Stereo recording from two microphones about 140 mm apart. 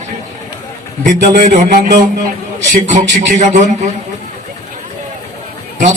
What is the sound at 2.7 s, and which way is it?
Speech, 60° right (ahead or behind).